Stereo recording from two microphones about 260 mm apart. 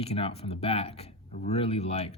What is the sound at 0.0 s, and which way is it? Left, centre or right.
Speech, left.